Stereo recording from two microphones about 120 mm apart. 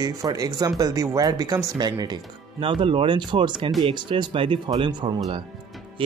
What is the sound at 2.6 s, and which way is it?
Speech, 45° right (ahead or behind).